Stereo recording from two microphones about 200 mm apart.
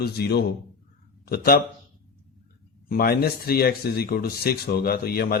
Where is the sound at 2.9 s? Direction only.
50° left (ahead or behind).